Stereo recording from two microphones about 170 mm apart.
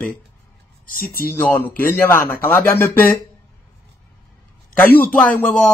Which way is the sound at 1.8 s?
15° left (ahead or behind).